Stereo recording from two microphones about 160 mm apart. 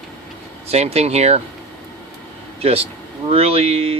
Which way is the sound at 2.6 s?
40° right (ahead or behind).